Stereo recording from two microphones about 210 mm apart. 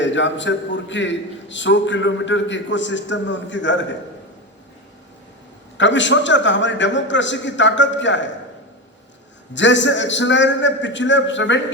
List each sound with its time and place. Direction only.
0.0 s a man's voice: 60° left (ahead or behind)
5.7 s a man's voice: 60° left (ahead or behind)
9.5 s a man's voice: 60° left (ahead or behind)